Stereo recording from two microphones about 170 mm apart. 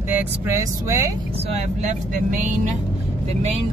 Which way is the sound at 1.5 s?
45° right (ahead or behind).